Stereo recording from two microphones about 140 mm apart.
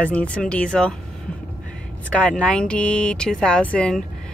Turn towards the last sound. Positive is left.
turn(degrees=5)  # may be behind; listen again after turning